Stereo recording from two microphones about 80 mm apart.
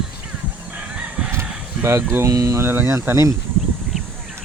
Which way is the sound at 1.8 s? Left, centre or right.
Right.